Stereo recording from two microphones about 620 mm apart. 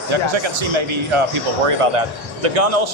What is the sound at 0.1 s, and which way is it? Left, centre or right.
Speech, right.